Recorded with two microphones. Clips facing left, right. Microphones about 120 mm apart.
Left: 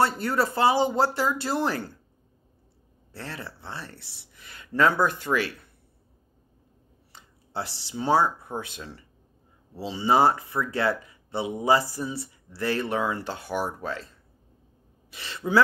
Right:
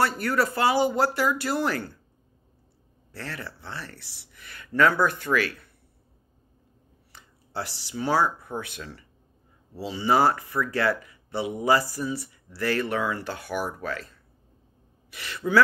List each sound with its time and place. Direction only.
0.0 s speech: 25° left (ahead or behind)
3.1 s speech: 25° left (ahead or behind)
7.1 s speech: 25° left (ahead or behind)